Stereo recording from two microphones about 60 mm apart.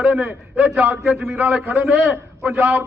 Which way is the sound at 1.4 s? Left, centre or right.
Right.